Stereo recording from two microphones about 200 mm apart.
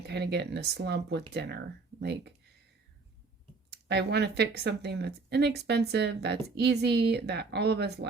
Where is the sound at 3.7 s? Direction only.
55° right (ahead or behind).